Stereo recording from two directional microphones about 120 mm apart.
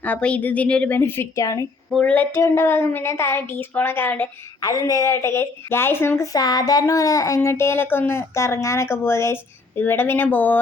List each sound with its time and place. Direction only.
0.0 s a woman's voice: 10° left (ahead or behind); by 1.6 s 25° left (ahead or behind)
1.9 s speech: 5° left (ahead or behind)
2.1 s a woman's voice: 20° left (ahead or behind)
4.6 s a woman's voice: 30° left (ahead or behind)